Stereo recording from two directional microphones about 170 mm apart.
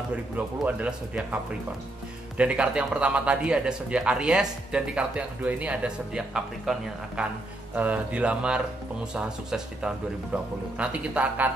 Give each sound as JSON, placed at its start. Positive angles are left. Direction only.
{"t": 0.7, "sound": "a man's voice", "side_deg": -10}